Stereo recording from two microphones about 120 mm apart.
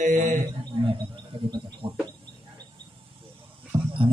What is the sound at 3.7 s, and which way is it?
Dog, 30° right (ahead or behind).